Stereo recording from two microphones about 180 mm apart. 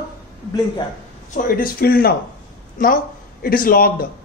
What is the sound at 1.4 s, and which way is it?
Speech, 50° left (ahead or behind).